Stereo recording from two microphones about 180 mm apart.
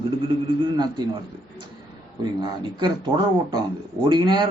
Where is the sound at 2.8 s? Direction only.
30° right (ahead or behind).